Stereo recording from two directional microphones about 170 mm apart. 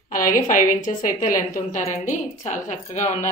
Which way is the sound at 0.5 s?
50° left (ahead or behind).